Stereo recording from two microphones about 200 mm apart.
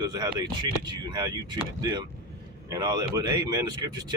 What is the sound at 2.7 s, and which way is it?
Speech, 20° right (ahead or behind).